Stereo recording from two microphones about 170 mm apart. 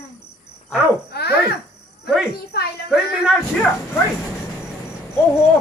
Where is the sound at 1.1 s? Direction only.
70° left (ahead or behind).